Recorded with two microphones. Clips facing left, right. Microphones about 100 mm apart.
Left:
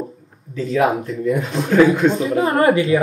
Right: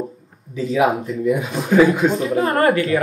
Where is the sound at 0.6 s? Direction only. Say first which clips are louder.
Even; 5° right (ahead or behind).